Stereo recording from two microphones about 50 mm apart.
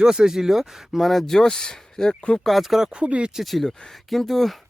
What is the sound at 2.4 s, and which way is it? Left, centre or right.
Speech, centre.